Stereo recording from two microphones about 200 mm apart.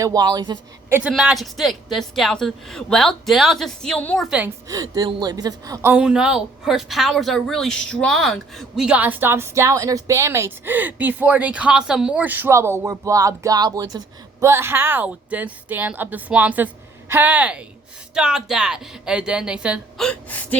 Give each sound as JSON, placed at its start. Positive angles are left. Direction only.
{"t": 0.0, "sound": "speech", "side_deg": -20}
{"t": 0.9, "sound": "speech", "side_deg": -5}
{"t": 4.3, "sound": "a woman's voice", "side_deg": -10}
{"t": 20.1, "sound": "a woman's voice", "side_deg": 10}